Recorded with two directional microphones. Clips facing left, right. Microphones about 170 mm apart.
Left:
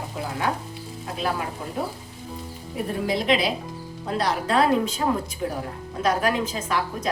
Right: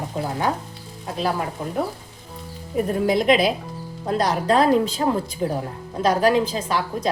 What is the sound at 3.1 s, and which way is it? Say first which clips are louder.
A woman's voice: right 4 dB; 50° right (ahead or behind).